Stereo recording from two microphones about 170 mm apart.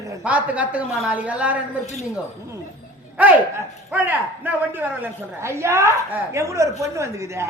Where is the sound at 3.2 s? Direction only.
10° right (ahead or behind).